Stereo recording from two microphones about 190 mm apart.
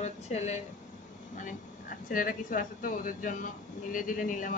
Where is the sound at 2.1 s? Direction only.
45° left (ahead or behind).